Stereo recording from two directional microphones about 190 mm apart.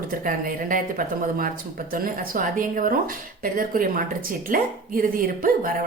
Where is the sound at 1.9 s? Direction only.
50° right (ahead or behind).